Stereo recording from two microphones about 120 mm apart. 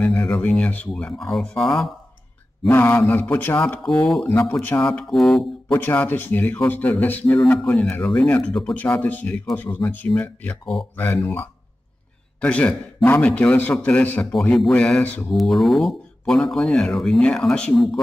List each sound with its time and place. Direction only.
0.0 s speech: 15° left (ahead or behind); by 1.9 s centre (ahead or behind)
2.7 s speech: 20° left (ahead or behind)
3.8 s speech: 5° left (ahead or behind)
4.2 s speech: 20° left (ahead or behind)
5.1 s speech: centre (ahead or behind)
5.7 s speech: 15° left (ahead or behind)
7.4 s speech: 5° left (ahead or behind)
14.3 s speech: centre (ahead or behind)
15.3 s speech: centre (ahead or behind)